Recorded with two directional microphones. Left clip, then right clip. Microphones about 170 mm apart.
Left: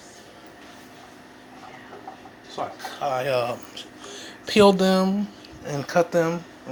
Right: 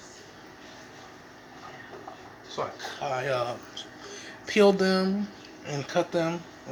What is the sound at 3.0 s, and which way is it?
Speech, 35° left (ahead or behind).